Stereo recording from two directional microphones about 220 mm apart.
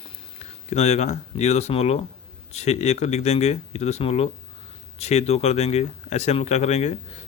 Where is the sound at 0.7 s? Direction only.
30° left (ahead or behind).